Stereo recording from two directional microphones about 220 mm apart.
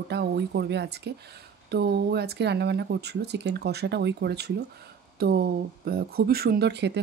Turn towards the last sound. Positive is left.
turn(degrees=-50)  # may be behind; listen again after turning